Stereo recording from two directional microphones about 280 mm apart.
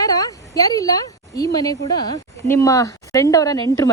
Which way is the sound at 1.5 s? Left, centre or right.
Centre.